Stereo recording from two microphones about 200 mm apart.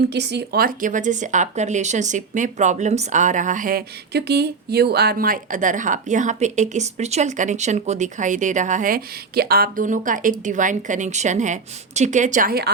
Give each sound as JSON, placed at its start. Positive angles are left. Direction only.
{"t": 0.1, "sound": "speech", "side_deg": -55}